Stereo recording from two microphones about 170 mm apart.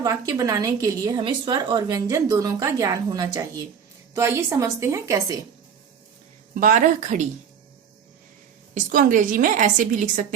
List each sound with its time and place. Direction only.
0.0 s a woman's voice: 20° right (ahead or behind)
6.5 s a woman's voice: 55° right (ahead or behind)
8.7 s a woman's voice: 50° right (ahead or behind)